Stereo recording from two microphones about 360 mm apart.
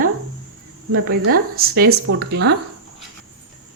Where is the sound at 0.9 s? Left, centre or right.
Right.